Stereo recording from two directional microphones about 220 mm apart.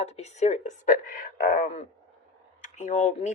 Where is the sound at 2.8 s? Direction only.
30° left (ahead or behind).